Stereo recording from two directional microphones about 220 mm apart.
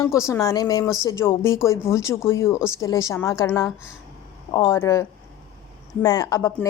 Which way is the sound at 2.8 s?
15° left (ahead or behind).